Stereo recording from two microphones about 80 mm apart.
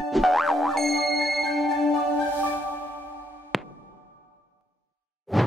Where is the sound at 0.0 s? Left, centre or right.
Centre.